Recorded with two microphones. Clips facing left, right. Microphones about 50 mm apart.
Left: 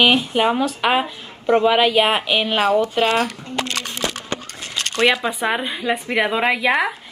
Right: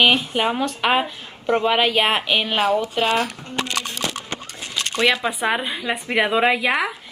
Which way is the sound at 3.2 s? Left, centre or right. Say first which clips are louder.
Left 2 dB; centre.